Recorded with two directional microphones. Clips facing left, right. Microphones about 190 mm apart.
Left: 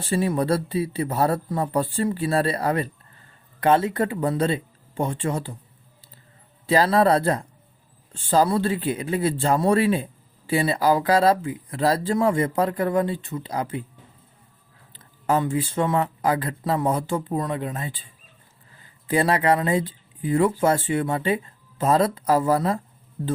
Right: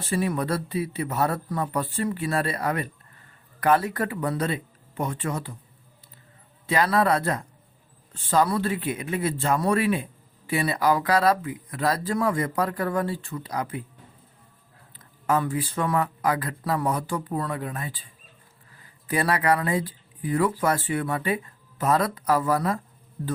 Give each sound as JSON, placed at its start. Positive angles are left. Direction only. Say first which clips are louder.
{"t": 0.0, "sound": "speech", "louder": "left 3 dB", "side_deg": 30}
{"t": 6.7, "sound": "speech", "louder": "left 4 dB", "side_deg": 30}
{"t": 14.9, "sound": "speech", "louder": "left 2 dB", "side_deg": 25}